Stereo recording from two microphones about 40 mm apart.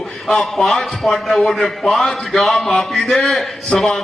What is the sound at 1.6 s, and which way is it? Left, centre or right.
Speech, centre.